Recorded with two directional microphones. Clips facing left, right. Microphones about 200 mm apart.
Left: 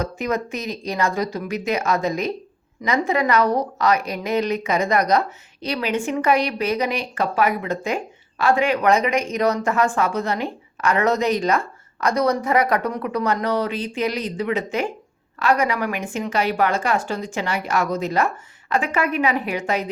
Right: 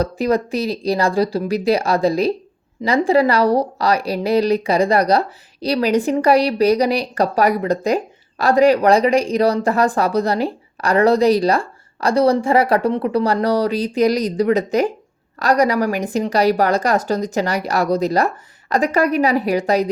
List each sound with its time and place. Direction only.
0.0 s speech: 35° right (ahead or behind)